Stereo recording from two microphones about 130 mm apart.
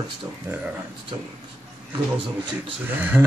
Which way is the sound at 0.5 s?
20° right (ahead or behind).